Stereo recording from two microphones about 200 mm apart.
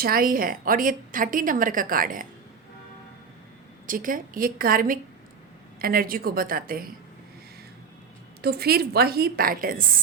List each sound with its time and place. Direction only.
0.0 s a woman's voice: 45° right (ahead or behind)
3.8 s a woman's voice: 45° right (ahead or behind)
8.4 s a woman's voice: 55° right (ahead or behind)